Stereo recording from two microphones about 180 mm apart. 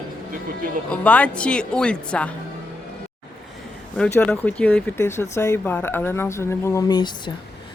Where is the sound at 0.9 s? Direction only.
5° left (ahead or behind).